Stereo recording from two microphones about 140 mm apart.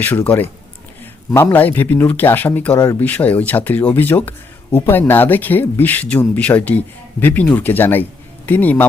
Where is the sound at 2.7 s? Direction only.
25° left (ahead or behind).